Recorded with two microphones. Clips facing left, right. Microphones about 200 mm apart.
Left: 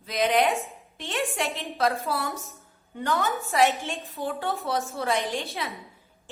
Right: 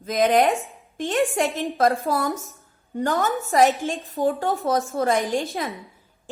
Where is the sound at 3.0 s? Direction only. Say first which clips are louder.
Right 4 dB; 40° right (ahead or behind).